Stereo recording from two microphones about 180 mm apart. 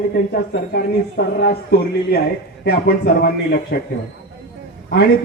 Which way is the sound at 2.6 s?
60° left (ahead or behind).